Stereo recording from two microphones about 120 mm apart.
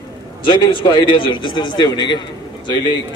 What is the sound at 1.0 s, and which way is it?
A man's voice, 40° left (ahead or behind).